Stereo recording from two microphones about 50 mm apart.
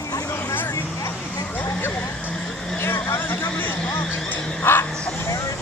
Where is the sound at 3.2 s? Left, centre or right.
Left.